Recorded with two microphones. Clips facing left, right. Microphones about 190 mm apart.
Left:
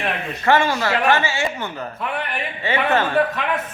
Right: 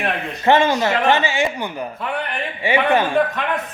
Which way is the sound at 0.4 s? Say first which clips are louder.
Right 3 dB; 20° right (ahead or behind).